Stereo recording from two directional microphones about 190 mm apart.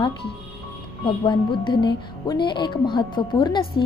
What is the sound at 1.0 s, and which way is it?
Speech, 25° left (ahead or behind).